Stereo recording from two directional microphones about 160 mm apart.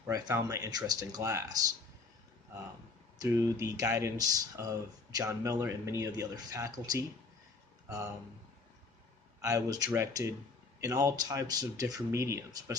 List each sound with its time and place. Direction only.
0.1 s speech: 20° right (ahead or behind)
3.2 s speech: 20° right (ahead or behind)
9.4 s speech: 20° right (ahead or behind)